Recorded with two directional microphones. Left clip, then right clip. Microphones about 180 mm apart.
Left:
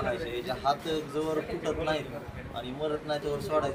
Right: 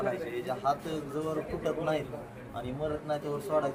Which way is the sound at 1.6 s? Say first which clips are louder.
Left 1 dB; 5° right (ahead or behind).